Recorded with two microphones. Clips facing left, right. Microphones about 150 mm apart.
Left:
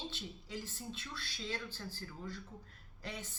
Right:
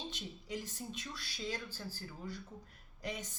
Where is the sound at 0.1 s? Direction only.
15° right (ahead or behind).